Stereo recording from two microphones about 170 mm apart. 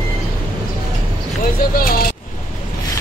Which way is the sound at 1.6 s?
60° left (ahead or behind).